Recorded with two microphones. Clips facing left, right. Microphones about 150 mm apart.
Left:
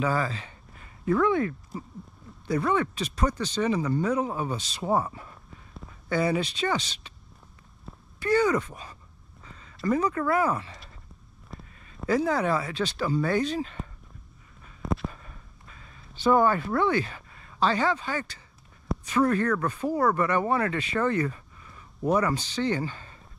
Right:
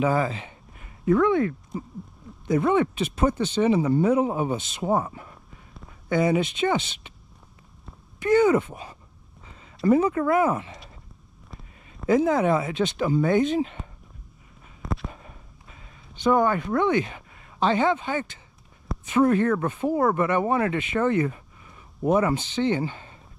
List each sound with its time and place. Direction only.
0.0 s speech: 20° right (ahead or behind)
8.2 s speech: 20° right (ahead or behind)
12.1 s speech: 20° right (ahead or behind)
14.8 s a sound: centre (ahead or behind)
16.4 s speech: 20° right (ahead or behind)